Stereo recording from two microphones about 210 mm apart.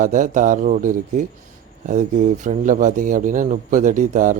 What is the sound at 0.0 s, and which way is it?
A man's voice, 40° right (ahead or behind).